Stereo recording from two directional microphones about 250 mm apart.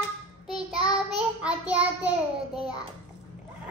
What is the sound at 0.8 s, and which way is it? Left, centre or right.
Child singing, centre.